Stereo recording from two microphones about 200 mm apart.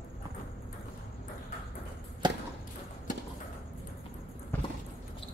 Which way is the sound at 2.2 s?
20° right (ahead or behind).